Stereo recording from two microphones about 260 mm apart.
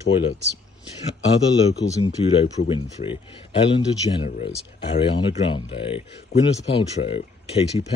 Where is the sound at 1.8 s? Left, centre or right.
Centre.